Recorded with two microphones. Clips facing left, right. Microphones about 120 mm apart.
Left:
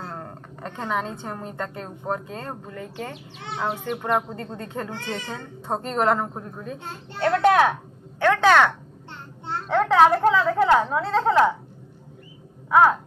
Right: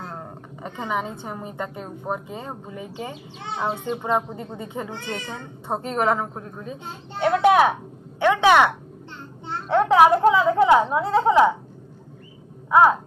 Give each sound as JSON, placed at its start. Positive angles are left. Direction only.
{"t": 0.1, "sound": "a woman's voice", "side_deg": -5}
{"t": 4.3, "sound": "a woman's voice", "side_deg": -10}
{"t": 6.9, "sound": "a woman's voice", "side_deg": -15}